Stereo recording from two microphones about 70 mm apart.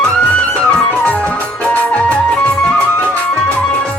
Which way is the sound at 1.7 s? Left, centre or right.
Left.